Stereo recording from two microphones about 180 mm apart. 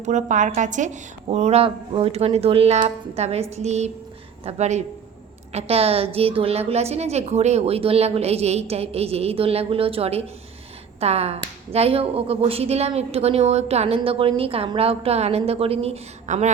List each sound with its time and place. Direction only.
0.0 s a woman's voice: 40° right (ahead or behind)